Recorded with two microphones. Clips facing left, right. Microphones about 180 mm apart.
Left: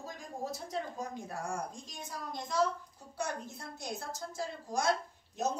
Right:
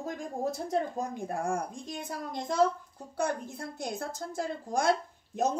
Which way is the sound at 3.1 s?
55° right (ahead or behind).